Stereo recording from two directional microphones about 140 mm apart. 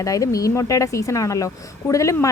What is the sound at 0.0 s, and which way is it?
A woman's voice, 25° left (ahead or behind).